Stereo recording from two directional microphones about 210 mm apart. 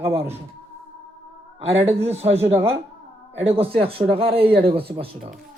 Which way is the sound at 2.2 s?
30° right (ahead or behind).